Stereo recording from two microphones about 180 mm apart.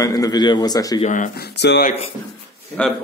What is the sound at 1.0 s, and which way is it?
Speech, 45° left (ahead or behind).